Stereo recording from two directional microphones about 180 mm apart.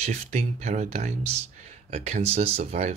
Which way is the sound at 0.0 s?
40° right (ahead or behind).